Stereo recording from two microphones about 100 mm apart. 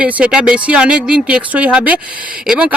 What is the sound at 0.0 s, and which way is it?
Speech, 10° right (ahead or behind).